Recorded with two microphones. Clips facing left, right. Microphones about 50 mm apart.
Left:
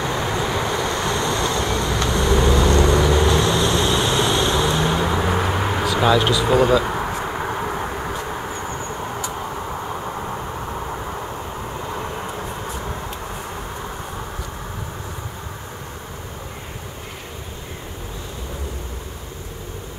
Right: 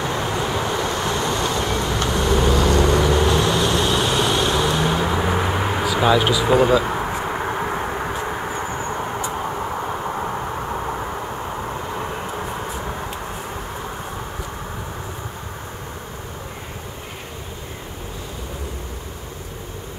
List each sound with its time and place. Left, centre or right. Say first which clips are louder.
0.0 s vehicle: even; centre
12.6 s train: right 1 dB; centre